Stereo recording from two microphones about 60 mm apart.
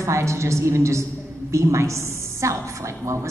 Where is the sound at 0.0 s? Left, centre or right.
Right.